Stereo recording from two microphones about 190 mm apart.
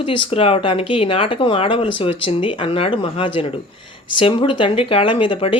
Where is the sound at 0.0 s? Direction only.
30° left (ahead or behind).